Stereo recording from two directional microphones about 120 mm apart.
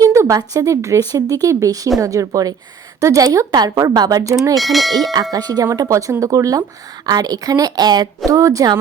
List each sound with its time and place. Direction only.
0.0 s a woman's voice: 25° right (ahead or behind)
4.5 s speech: centre (ahead or behind)
5.3 s a woman's voice: 35° right (ahead or behind)